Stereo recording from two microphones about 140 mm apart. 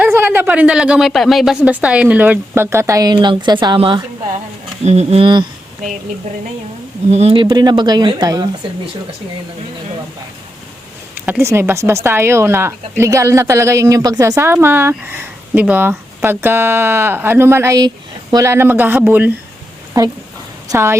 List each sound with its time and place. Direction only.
0.0 s a woman's voice: 15° right (ahead or behind); by 4.0 s 35° right (ahead or behind)
4.9 s speech: 50° right (ahead or behind)
5.2 s speech: 35° right (ahead or behind)
7.1 s speech: 50° right (ahead or behind); by 8.4 s 30° right (ahead or behind)
11.3 s a woman's voice: 15° right (ahead or behind)
19.9 s speech: 25° right (ahead or behind)